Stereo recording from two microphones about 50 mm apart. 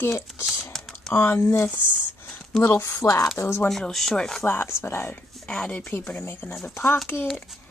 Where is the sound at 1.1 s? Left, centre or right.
Left.